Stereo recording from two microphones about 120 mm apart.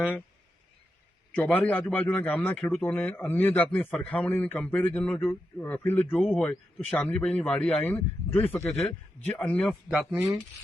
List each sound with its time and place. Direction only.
1.4 s a man's voice: 15° left (ahead or behind)
9.4 s speech: 5° left (ahead or behind)